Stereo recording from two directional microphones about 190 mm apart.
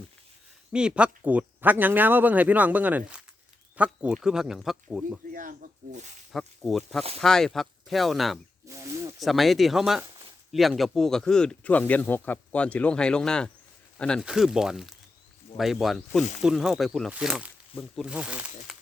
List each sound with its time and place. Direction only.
0.7 s speech: 5° right (ahead or behind)
5.3 s speech: 45° right (ahead or behind)
6.3 s speech: centre (ahead or behind)
8.6 s a sound: 15° right (ahead or behind)
9.1 s speech: centre (ahead or behind)